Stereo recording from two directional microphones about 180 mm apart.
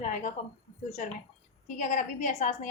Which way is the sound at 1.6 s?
45° left (ahead or behind).